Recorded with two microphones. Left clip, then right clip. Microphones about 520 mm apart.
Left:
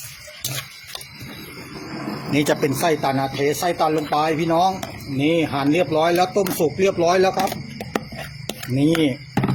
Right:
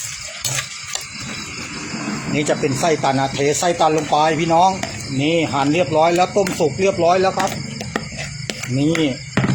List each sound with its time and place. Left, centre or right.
2.3 s speech: left
8.4 s speech: left